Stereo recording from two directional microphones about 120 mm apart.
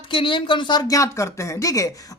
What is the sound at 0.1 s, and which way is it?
Speech, 45° left (ahead or behind).